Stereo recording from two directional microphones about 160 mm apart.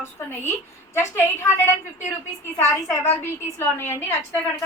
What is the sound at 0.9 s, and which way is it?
Speech, 15° left (ahead or behind).